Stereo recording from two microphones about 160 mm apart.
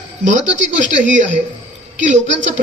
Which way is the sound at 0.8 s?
50° right (ahead or behind).